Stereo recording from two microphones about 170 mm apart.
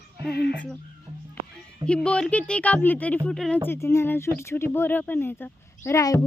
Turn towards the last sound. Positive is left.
turn(degrees=15)  # may be behind; listen again after turning